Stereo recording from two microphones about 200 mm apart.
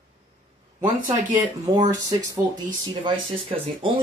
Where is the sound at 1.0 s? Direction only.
15° right (ahead or behind).